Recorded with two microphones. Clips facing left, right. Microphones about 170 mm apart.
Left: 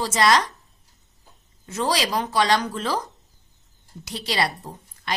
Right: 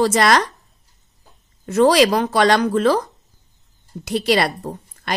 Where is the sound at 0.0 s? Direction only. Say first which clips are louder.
Right 4 dB; 60° right (ahead or behind).